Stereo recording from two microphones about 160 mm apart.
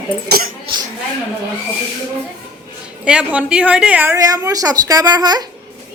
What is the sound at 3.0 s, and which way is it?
A woman's voice, 5° right (ahead or behind).